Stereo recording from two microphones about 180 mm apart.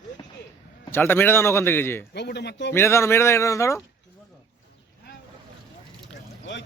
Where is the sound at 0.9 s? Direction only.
10° left (ahead or behind).